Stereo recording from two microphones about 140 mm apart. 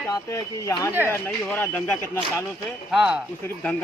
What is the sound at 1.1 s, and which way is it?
Speech, 15° left (ahead or behind).